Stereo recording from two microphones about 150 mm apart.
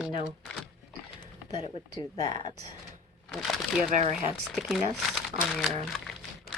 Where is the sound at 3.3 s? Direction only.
Centre (ahead or behind).